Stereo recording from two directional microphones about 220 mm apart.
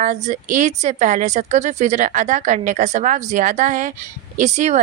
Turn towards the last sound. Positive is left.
turn(degrees=-30)  # may be behind; listen again after turning